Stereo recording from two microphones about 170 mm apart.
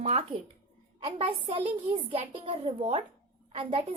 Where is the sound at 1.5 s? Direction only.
35° right (ahead or behind).